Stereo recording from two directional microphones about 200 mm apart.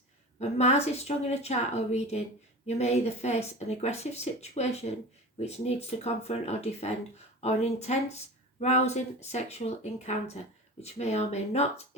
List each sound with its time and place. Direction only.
0.3 s speech: 35° left (ahead or behind)